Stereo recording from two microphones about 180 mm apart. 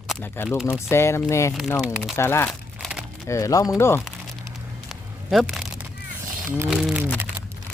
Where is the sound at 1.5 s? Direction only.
Centre (ahead or behind).